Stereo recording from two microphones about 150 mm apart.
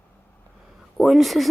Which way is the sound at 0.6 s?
Centre (ahead or behind).